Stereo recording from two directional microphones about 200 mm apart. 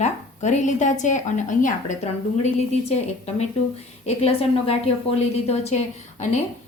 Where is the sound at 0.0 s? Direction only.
35° left (ahead or behind).